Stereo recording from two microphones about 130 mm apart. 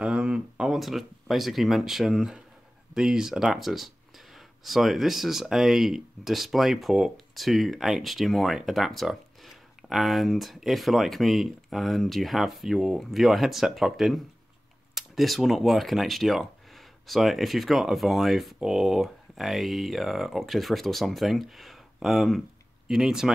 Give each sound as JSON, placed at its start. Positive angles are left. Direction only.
{"t": 0.0, "sound": "speech", "side_deg": -5}